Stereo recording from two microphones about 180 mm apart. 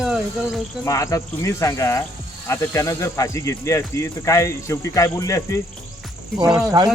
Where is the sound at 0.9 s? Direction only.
15° left (ahead or behind).